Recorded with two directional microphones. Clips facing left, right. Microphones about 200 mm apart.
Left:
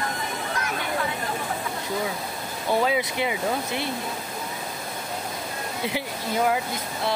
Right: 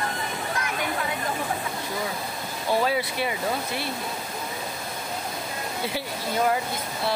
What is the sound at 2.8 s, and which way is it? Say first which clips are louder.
Vehicle: left 1 dB; 15° left (ahead or behind).